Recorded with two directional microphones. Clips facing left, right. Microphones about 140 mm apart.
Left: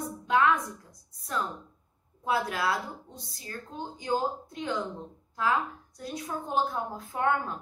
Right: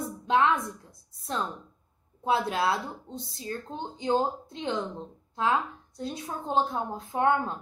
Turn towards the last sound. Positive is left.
turn(degrees=-25)  # may be behind; listen again after turning